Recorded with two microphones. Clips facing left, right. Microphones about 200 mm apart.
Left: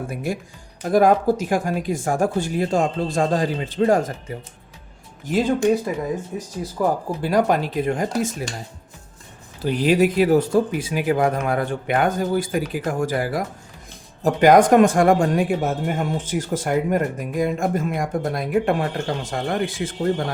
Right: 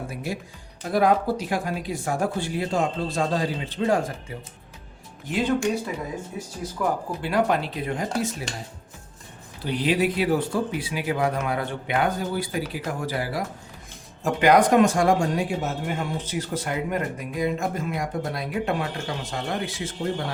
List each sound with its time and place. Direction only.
0.1 s speech: 55° left (ahead or behind)
6.8 s speech: 35° left (ahead or behind)
9.6 s speech: 45° left (ahead or behind)